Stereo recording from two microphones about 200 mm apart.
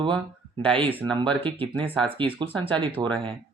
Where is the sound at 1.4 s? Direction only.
25° right (ahead or behind).